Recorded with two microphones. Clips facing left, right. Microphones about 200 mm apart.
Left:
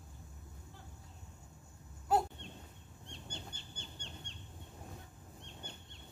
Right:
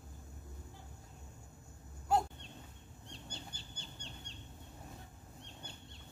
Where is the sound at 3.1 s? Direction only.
35° right (ahead or behind).